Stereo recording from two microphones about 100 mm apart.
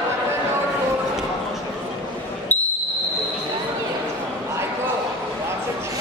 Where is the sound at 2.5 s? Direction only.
20° left (ahead or behind).